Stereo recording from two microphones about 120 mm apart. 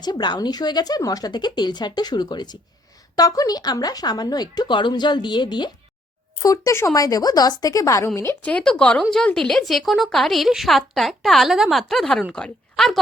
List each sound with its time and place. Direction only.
0.0 s a woman's voice: 40° left (ahead or behind)
6.4 s a woman's voice: 25° left (ahead or behind)
8.4 s a woman's voice: 10° left (ahead or behind)